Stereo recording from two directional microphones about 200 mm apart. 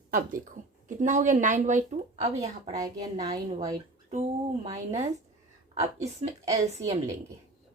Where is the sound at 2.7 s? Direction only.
20° right (ahead or behind).